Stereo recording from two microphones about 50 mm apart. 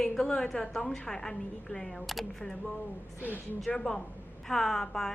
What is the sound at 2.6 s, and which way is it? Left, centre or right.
Speech, left.